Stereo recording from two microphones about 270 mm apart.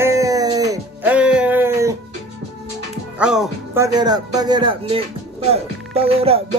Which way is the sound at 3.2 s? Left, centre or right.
Centre.